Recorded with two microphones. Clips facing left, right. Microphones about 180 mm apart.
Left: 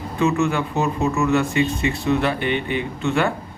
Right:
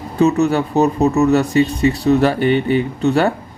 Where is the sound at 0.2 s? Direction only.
40° right (ahead or behind).